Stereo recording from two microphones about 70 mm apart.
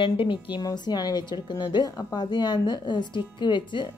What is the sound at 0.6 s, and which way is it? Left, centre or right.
A woman's voice, left.